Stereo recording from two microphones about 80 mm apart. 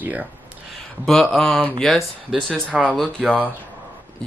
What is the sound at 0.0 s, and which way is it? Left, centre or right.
Speech, centre.